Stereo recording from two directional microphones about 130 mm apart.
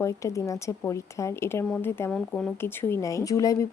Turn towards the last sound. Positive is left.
turn(degrees=25)  # may be behind; listen again after turning